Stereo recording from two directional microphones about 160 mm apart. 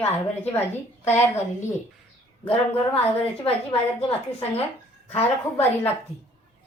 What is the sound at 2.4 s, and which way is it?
Speech, 35° left (ahead or behind).